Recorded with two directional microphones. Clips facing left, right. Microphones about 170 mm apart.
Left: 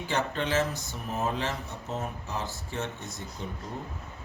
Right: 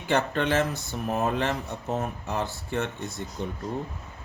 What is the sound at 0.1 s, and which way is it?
Speech, 60° right (ahead or behind).